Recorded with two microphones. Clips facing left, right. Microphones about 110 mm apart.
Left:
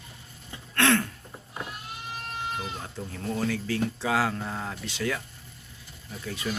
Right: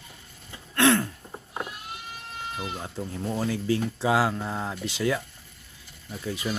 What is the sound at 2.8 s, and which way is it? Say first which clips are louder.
Speech: right 3 dB; 20° right (ahead or behind).